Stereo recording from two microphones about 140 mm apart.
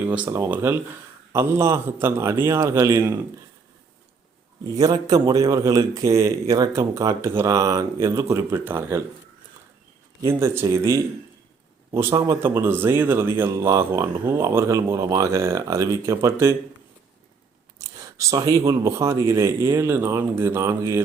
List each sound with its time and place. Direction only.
0.1 s speech: 15° right (ahead or behind)
4.6 s speech: 25° right (ahead or behind)
10.2 s a man's voice: 20° right (ahead or behind)
18.2 s speech: 25° right (ahead or behind)